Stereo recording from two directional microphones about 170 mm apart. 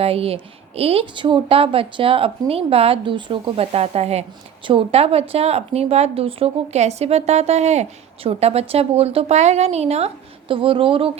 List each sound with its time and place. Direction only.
0.0 s a woman's voice: 35° right (ahead or behind)